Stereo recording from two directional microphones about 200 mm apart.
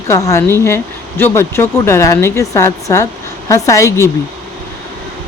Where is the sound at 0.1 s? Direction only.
15° left (ahead or behind).